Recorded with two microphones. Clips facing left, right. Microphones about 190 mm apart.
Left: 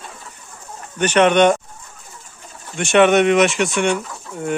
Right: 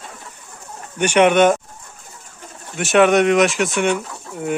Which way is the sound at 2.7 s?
Centre (ahead or behind).